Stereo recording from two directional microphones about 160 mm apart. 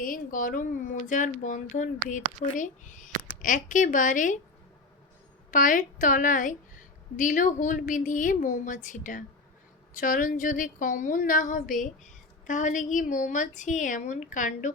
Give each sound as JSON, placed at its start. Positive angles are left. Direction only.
{"t": 0.0, "sound": "speech", "side_deg": 60}
{"t": 5.5, "sound": "a woman's voice", "side_deg": 55}